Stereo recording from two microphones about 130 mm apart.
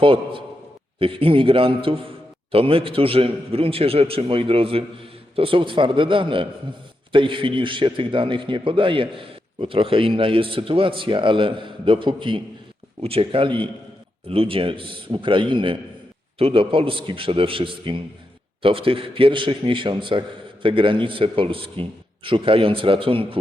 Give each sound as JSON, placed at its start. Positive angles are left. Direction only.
{"t": 0.0, "sound": "a man's voice", "side_deg": -40}